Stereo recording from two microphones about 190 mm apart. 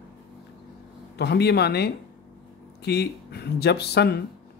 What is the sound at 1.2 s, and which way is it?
Speech, 60° left (ahead or behind).